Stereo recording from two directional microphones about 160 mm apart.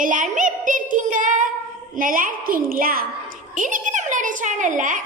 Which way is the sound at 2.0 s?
60° right (ahead or behind).